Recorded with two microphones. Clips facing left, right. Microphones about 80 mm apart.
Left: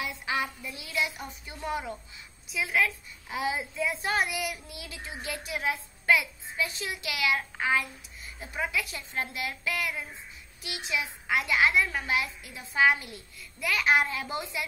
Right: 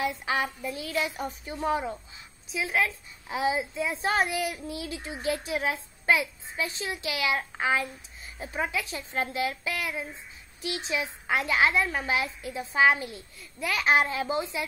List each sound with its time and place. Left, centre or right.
0.0 s a woman's voice: right